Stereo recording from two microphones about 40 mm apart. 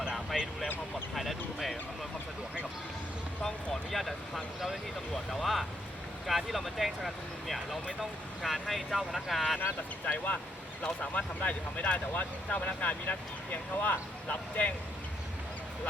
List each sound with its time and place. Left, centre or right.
0.3 s a sound: centre
3.4 s vehicle: centre
5.3 s a sound: centre
8.4 s speech: centre
10.1 s speech: left
10.8 s speech: left